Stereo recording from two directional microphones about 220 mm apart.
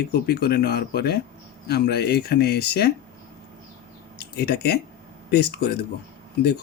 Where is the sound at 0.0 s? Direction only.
45° left (ahead or behind).